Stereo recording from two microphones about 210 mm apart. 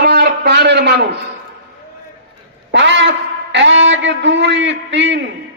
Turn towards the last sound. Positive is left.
turn(degrees=-60)  # may be behind; listen again after turning